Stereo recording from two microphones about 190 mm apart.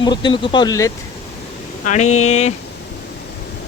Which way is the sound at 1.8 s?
40° left (ahead or behind).